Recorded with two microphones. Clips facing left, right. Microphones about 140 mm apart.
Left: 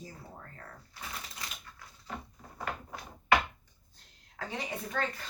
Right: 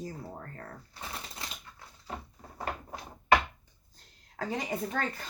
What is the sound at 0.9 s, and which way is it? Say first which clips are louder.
Speech: left 1 dB; 30° right (ahead or behind).